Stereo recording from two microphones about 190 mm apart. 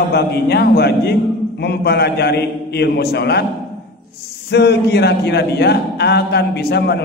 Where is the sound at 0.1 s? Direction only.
60° left (ahead or behind).